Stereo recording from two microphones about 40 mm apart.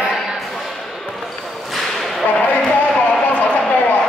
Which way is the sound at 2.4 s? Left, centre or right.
Left.